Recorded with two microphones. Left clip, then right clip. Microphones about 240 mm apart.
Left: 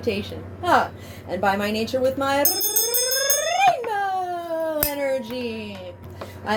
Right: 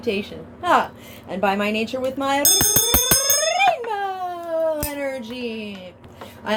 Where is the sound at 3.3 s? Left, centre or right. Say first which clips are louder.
Even; right.